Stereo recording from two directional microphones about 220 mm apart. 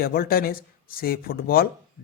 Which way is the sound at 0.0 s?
40° left (ahead or behind).